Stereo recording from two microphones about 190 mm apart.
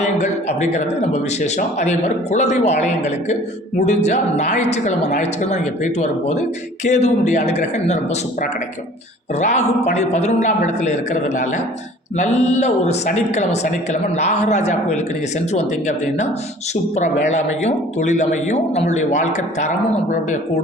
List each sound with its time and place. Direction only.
0.0 s a man's voice: 35° left (ahead or behind)